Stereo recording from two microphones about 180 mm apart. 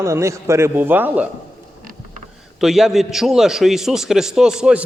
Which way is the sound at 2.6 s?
Centre (ahead or behind).